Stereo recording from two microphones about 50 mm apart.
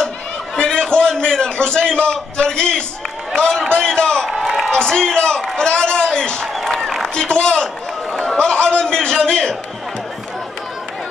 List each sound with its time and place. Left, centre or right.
0.6 s a sound: centre
3.3 s a man's voice: centre
7.6 s a man's voice: centre